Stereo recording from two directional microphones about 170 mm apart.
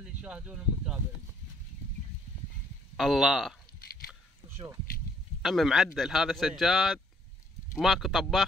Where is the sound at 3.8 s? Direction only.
60° left (ahead or behind).